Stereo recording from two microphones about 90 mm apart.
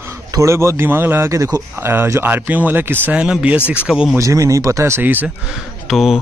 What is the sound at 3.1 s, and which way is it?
Speech, 10° right (ahead or behind).